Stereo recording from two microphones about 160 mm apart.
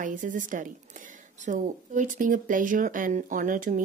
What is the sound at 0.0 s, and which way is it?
Speech, 55° right (ahead or behind).